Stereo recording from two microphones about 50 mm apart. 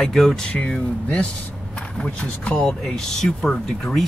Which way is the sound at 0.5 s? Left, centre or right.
Left.